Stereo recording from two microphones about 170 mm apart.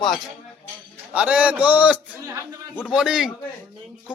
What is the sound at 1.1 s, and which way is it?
A man's voice, 10° right (ahead or behind).